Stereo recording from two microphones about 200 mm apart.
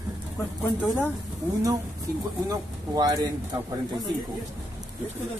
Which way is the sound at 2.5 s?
20° right (ahead or behind).